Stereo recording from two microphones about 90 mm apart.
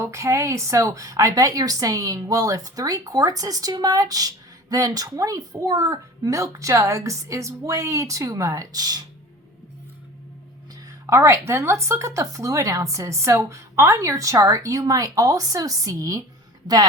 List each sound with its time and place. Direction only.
0.0 s speech: 35° right (ahead or behind)
11.0 s speech: 30° right (ahead or behind)